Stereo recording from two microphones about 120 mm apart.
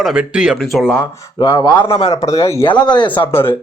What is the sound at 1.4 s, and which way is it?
Speech, 35° left (ahead or behind).